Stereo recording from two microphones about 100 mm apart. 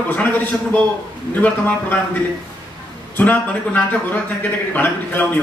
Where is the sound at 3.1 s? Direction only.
15° left (ahead or behind).